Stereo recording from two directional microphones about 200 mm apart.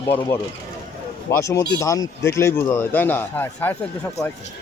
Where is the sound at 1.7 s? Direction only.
15° left (ahead or behind).